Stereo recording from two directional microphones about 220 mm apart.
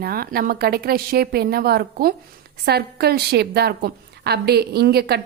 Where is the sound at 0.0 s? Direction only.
40° right (ahead or behind).